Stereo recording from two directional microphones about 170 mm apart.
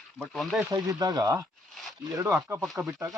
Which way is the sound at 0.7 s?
20° right (ahead or behind).